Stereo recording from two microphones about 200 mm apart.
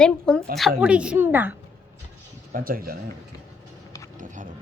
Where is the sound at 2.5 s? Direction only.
45° right (ahead or behind).